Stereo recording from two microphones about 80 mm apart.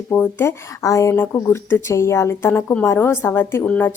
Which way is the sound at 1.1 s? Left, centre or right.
Left.